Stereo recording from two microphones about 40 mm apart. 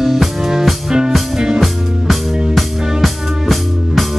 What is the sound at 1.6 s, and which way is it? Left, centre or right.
Music, centre.